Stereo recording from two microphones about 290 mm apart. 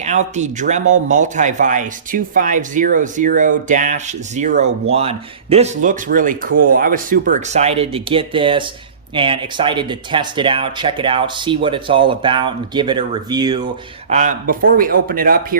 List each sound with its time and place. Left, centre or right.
0.0 s a man's voice: right
14.1 s a man's voice: right